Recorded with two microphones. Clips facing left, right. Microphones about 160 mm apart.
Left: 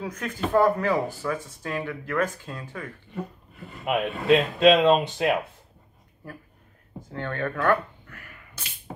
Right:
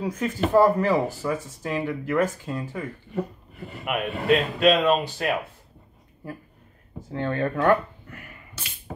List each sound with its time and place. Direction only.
0.0 s speech: 10° right (ahead or behind)
3.8 s speech: 25° left (ahead or behind)
7.2 s a sound: 15° right (ahead or behind)